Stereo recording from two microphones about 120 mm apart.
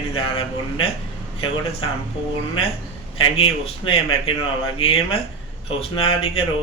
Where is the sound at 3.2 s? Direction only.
50° left (ahead or behind).